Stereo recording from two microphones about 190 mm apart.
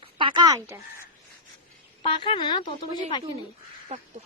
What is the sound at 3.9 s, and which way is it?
Speech, 35° right (ahead or behind).